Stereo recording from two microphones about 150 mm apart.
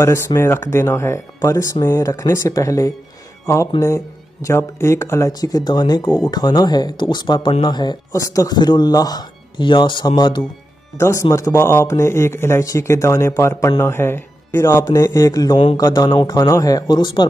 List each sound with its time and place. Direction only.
0.0 s a man's voice: 20° left (ahead or behind)